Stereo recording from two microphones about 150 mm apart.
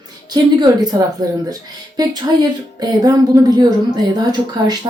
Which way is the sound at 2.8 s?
25° right (ahead or behind).